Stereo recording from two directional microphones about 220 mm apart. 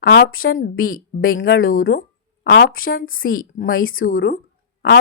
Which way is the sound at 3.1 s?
40° left (ahead or behind).